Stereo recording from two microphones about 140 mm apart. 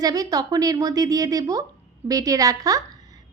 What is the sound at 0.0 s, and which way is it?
A woman's voice, 25° right (ahead or behind).